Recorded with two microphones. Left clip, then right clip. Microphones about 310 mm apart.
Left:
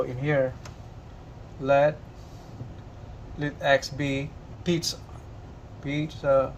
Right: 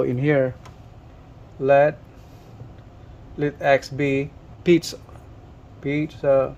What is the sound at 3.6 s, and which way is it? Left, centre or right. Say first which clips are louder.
Speech: right 4 dB; right.